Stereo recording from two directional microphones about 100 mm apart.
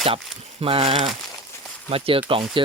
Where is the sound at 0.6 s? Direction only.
70° right (ahead or behind).